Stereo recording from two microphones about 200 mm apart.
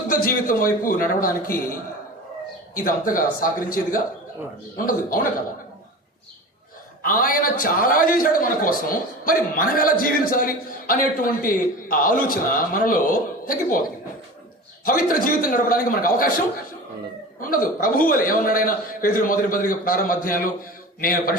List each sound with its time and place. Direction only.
0.1 s a man's voice: 45° left (ahead or behind)
7.0 s a man's voice: 45° left (ahead or behind)
14.8 s a man's voice: 45° left (ahead or behind)
17.4 s a man's voice: 45° left (ahead or behind)